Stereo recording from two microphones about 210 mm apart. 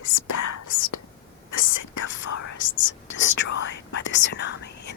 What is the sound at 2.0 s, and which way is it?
Whispering, 65° left (ahead or behind).